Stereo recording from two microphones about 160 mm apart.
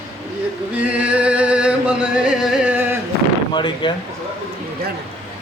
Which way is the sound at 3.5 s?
30° left (ahead or behind).